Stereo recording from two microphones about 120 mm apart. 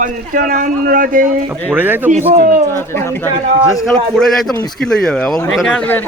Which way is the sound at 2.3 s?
90° right.